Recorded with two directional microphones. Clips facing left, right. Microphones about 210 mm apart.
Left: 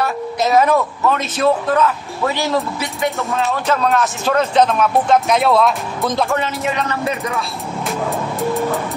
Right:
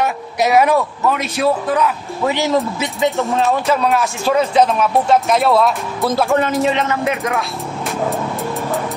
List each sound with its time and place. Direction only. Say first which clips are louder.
0.0 s a man's voice: right 1 dB; 15° right (ahead or behind)
7.1 s a man's voice: right 2 dB; 15° right (ahead or behind)